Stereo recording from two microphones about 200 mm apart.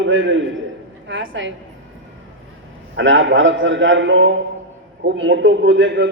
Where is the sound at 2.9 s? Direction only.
70° right (ahead or behind).